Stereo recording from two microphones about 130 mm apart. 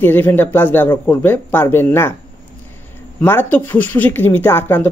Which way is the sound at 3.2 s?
15° left (ahead or behind).